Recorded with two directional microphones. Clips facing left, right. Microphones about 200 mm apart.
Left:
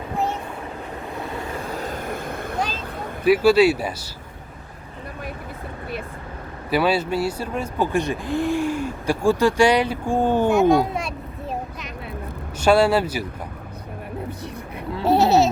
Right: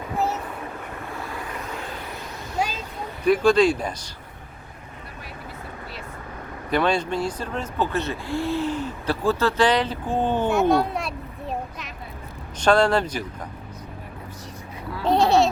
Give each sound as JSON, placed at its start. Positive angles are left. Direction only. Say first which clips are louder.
{"t": 1.7, "sound": "vehicle", "louder": "left 6 dB", "side_deg": 40}
{"t": 3.2, "sound": "speech", "louder": "left 2 dB", "side_deg": 5}
{"t": 6.7, "sound": "speech", "louder": "left 2 dB", "side_deg": 5}
{"t": 15.0, "sound": "goat", "louder": "left 2 dB", "side_deg": 5}